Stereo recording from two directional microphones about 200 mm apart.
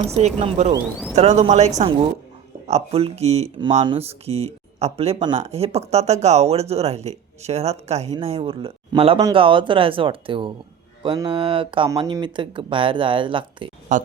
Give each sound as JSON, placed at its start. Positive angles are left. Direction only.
{"t": 0.2, "sound": "speech", "side_deg": -35}
{"t": 13.9, "sound": "speech", "side_deg": -40}